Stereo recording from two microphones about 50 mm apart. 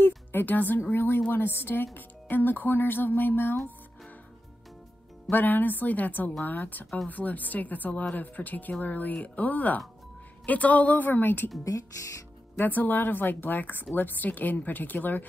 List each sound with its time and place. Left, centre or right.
0.0 s a woman's voice: left
5.3 s speech: left
12.5 s speech: left